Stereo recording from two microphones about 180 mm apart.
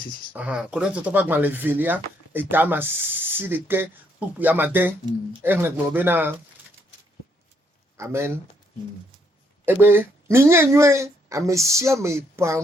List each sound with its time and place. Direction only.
0.3 s speech: 5° right (ahead or behind)
7.9 s speech: 15° right (ahead or behind)
9.6 s speech: 10° right (ahead or behind)